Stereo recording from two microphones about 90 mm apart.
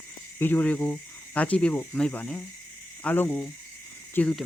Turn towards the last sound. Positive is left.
turn(degrees=15)  # may be behind; listen again after turning